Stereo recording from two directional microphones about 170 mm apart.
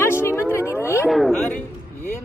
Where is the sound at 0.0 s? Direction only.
15° left (ahead or behind).